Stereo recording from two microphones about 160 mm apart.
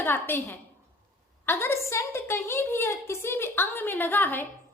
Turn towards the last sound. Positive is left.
turn(degrees=10)  # may be behind; listen again after turning